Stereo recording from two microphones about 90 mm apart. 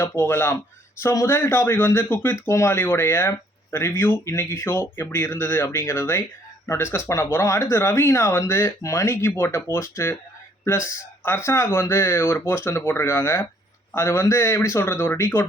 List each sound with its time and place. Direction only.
0.0 s speech: 25° left (ahead or behind)